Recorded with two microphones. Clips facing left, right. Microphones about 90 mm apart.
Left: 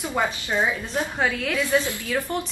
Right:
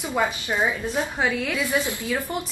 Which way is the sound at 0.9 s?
5° right (ahead or behind).